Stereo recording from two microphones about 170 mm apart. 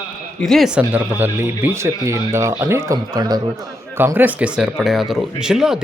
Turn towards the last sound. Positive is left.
turn(degrees=-5)  # may be behind; listen again after turning